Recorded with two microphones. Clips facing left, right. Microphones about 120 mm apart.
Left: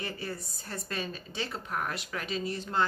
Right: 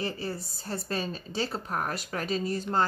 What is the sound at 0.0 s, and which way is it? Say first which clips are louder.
A woman's voice: right 4 dB; 30° right (ahead or behind).